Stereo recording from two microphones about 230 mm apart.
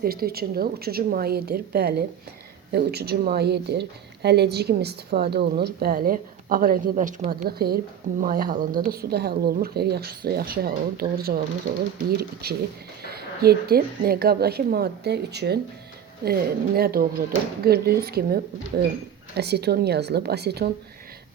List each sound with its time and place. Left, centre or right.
0.0 s speech: right